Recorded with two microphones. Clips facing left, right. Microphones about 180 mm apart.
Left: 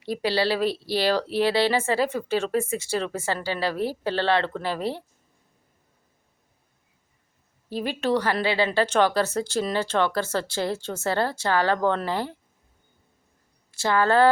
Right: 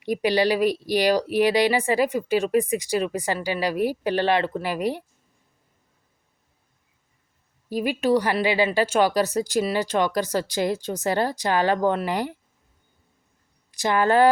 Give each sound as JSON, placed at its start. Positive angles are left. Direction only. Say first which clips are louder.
{"t": 0.0, "sound": "speech", "louder": "right 3 dB", "side_deg": -15}
{"t": 7.7, "sound": "speech", "louder": "right 3 dB", "side_deg": -10}
{"t": 13.7, "sound": "a woman's voice", "louder": "right 1 dB", "side_deg": -15}